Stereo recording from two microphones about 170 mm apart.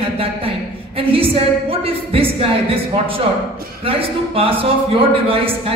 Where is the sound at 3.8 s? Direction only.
35° right (ahead or behind).